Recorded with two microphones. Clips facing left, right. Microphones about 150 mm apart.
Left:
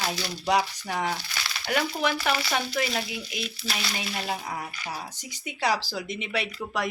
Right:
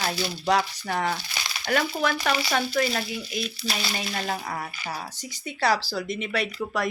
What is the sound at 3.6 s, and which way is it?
Speech, centre (ahead or behind).